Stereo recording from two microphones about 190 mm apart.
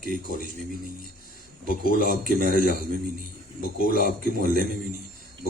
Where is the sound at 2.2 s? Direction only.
45° right (ahead or behind).